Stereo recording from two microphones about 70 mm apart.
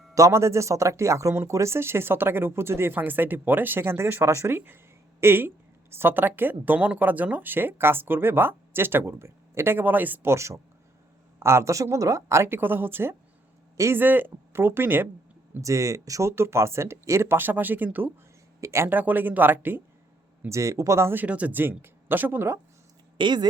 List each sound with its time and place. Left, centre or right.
0.1 s speech: right
10.3 s speech: right
15.6 s speech: right
16.3 s speech: right
18.6 s speech: right
18.9 s speech: right
20.5 s speech: right
21.1 s speech: right